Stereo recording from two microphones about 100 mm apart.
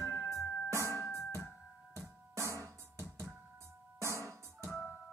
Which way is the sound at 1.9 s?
30° right (ahead or behind).